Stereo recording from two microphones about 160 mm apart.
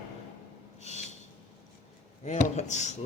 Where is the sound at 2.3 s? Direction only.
45° left (ahead or behind).